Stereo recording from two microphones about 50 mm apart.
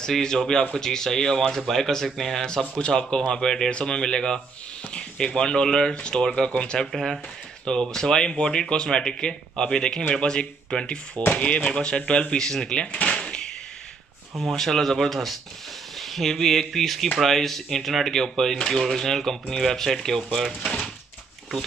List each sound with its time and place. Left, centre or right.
0.1 s speech: centre
12.8 s drawer open or close: left
14.4 s speech: centre